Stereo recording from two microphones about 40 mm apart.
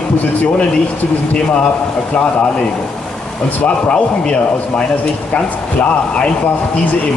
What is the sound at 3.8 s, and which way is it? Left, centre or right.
Speech, left.